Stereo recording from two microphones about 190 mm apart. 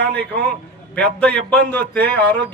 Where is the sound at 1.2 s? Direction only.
5° left (ahead or behind).